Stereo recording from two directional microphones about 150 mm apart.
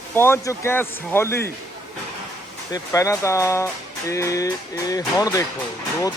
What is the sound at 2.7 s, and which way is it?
Speech, 20° left (ahead or behind).